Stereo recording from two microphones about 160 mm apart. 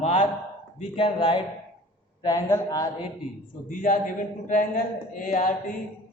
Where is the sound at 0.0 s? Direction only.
50° left (ahead or behind).